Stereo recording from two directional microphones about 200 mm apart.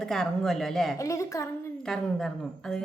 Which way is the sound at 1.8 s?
5° left (ahead or behind).